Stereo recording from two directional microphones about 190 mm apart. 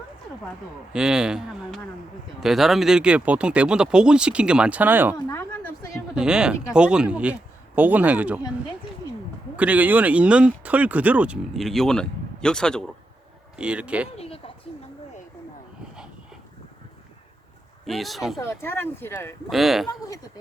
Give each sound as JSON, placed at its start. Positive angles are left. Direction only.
{"t": 0.9, "sound": "speech", "side_deg": -5}
{"t": 5.1, "sound": "a sound", "side_deg": 15}
{"t": 6.1, "sound": "speech", "side_deg": -5}
{"t": 9.6, "sound": "speech", "side_deg": -10}
{"t": 14.2, "sound": "a sound", "side_deg": 30}
{"t": 17.8, "sound": "speech", "side_deg": 0}
{"t": 18.3, "sound": "speech", "side_deg": 15}
{"t": 19.5, "sound": "speech", "side_deg": 0}